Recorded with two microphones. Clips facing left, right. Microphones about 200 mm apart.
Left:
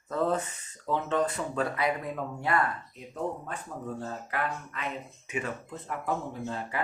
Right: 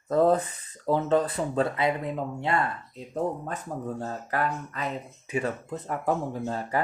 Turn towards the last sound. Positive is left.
turn(degrees=-40)  # may be behind; listen again after turning